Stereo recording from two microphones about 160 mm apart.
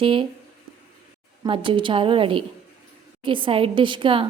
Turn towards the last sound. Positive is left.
turn(degrees=-30)  # may be behind; listen again after turning